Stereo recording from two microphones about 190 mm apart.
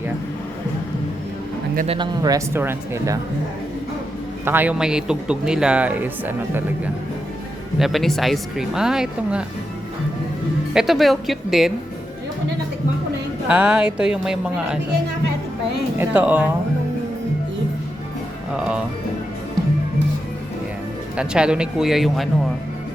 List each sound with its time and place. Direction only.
1.9 s speech: 20° right (ahead or behind)
4.4 s speech: 10° right (ahead or behind)
10.8 s speech: centre (ahead or behind)
13.5 s speech: 5° right (ahead or behind)
16.0 s speech: 10° right (ahead or behind)
21.2 s speech: 5° right (ahead or behind)